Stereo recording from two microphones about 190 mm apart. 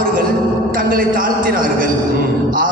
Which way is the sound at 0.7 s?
50° right (ahead or behind).